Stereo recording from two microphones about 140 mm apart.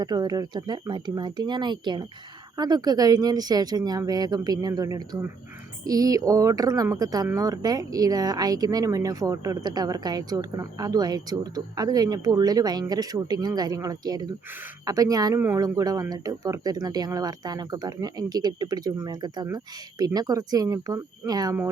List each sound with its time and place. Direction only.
0.0 s speech: 30° right (ahead or behind)
15.4 s speech: 15° right (ahead or behind)
15.6 s speech: 25° right (ahead or behind)